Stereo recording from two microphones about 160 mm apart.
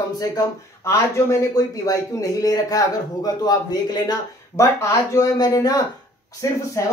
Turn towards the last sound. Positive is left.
turn(degrees=20)  # may be behind; listen again after turning